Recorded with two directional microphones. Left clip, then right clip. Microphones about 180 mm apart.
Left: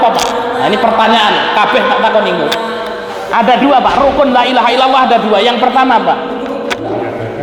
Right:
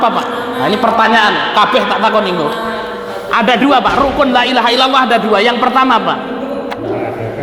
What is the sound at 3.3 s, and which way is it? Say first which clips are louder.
A man's voice: left 2 dB; 40° right (ahead or behind).